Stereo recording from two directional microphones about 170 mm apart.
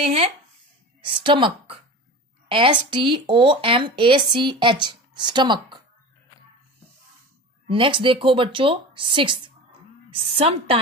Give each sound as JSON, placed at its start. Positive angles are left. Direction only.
{"t": 0.0, "sound": "a woman's voice", "side_deg": -35}
{"t": 7.6, "sound": "a woman's voice", "side_deg": -30}